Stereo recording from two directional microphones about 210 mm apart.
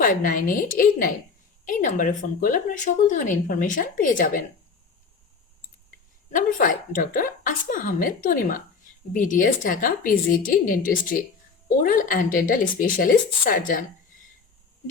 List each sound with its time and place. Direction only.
0.0 s speech: 40° left (ahead or behind)
6.3 s speech: 40° left (ahead or behind)